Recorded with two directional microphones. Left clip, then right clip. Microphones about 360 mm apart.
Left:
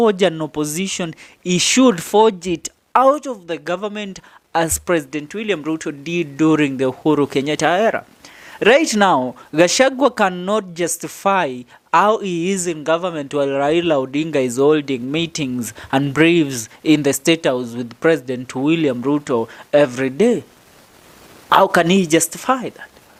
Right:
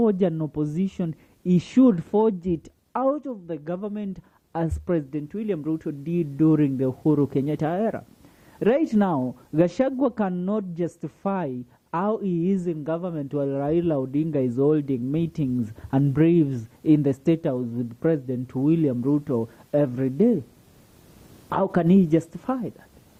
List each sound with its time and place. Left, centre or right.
0.0 s speech: centre
21.5 s speech: centre